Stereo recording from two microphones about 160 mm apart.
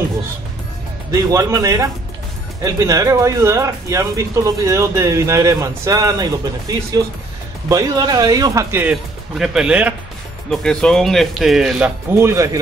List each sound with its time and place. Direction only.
1.1 s speech: 20° right (ahead or behind)
8.9 s speech: 5° right (ahead or behind)
10.5 s speech: 5° left (ahead or behind)
12.1 s speech: 15° right (ahead or behind)